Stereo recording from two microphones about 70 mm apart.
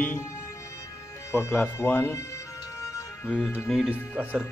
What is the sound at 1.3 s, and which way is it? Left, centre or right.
Speech, left.